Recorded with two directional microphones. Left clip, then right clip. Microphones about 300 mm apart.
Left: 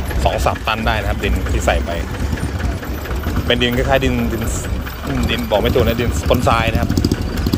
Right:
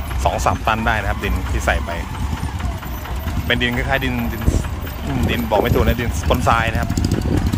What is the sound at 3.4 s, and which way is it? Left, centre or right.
Speech, centre.